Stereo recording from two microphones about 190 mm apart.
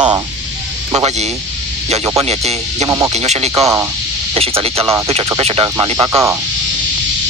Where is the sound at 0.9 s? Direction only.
35° right (ahead or behind).